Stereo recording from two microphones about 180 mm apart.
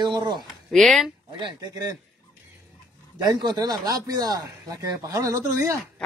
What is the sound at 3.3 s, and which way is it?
Speech, 25° right (ahead or behind).